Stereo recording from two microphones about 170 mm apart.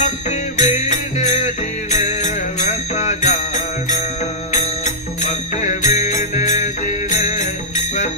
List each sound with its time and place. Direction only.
0.0 s music: 45° left (ahead or behind)